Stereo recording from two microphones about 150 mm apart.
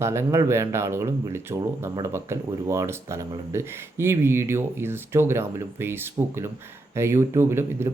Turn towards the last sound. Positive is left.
turn(degrees=-15)  # may be behind; listen again after turning